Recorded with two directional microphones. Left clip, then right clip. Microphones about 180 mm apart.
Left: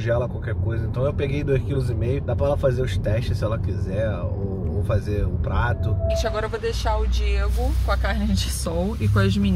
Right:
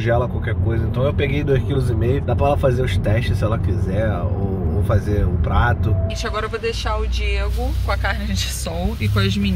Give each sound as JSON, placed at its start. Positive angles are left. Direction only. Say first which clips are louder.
{"t": 0.0, "sound": "speech", "louder": "right 4 dB", "side_deg": 0}
{"t": 9.1, "sound": "speech", "louder": "right 2 dB", "side_deg": 45}